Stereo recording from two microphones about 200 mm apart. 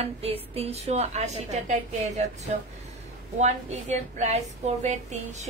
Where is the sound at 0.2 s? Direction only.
30° right (ahead or behind).